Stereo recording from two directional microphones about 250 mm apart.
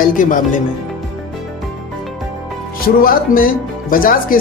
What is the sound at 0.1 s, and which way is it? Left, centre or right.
Speech, left.